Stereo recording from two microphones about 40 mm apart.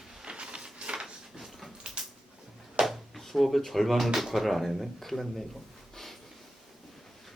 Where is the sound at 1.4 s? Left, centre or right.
Centre.